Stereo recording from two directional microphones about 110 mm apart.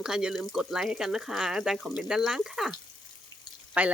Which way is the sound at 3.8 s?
15° right (ahead or behind).